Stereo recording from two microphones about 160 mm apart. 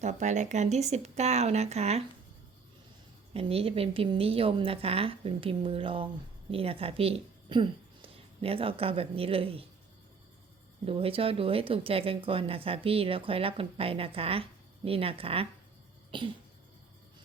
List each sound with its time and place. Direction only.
0.0 s speech: 45° right (ahead or behind)
3.3 s a woman's voice: 35° right (ahead or behind)
10.8 s speech: 35° right (ahead or behind)